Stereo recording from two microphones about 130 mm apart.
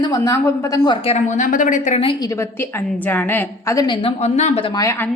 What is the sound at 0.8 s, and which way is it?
Speech, 50° left (ahead or behind).